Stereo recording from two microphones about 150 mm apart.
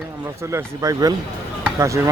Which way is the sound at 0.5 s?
20° right (ahead or behind).